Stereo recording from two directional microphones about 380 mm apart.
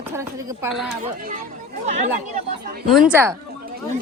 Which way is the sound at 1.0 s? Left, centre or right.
Right.